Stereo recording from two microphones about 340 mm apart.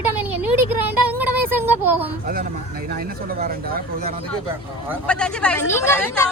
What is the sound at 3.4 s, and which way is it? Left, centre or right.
Speech, right.